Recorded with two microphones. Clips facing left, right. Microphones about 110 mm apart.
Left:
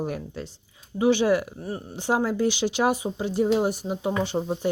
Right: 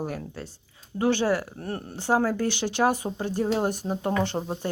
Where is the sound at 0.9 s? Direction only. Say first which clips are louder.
Left 3 dB; 15° left (ahead or behind).